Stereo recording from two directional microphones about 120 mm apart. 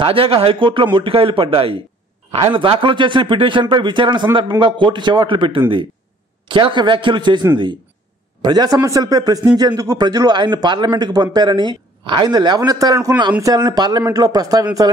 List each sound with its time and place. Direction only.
0.0 s a man's voice: 50° right (ahead or behind); by 14.9 s 30° right (ahead or behind)